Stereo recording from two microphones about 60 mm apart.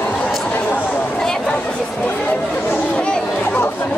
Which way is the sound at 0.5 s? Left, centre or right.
Left.